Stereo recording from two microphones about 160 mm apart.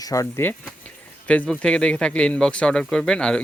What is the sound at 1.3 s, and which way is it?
Speech, 5° left (ahead or behind).